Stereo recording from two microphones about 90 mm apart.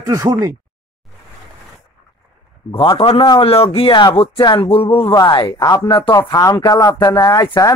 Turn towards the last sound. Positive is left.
turn(degrees=40)  # may be behind; listen again after turning